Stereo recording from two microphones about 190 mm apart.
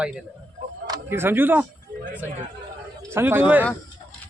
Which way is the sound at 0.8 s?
15° right (ahead or behind).